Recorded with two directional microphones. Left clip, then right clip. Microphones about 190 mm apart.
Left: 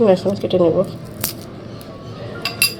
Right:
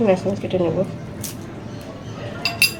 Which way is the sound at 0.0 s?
30° left (ahead or behind).